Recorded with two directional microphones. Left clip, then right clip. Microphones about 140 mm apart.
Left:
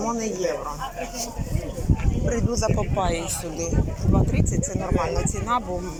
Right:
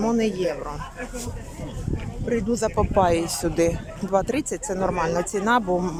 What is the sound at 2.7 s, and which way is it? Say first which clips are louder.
Speech: right 5 dB; 40° right (ahead or behind).